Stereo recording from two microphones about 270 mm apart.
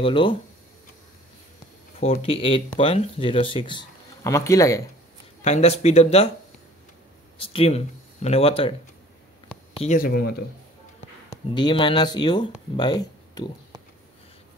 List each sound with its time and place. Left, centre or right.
0.0 s speech: centre
2.0 s speech: left
5.4 s speech: left
7.3 s speech: centre
9.8 s speech: left
11.5 s speech: centre